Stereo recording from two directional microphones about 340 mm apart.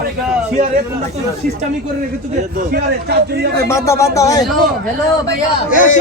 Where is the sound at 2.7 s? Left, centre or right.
Right.